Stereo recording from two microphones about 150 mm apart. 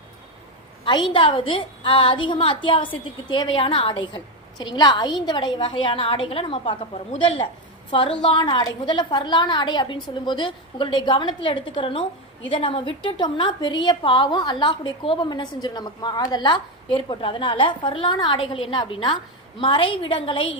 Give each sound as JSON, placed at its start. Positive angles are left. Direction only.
{"t": 0.9, "sound": "a woman's voice", "side_deg": 30}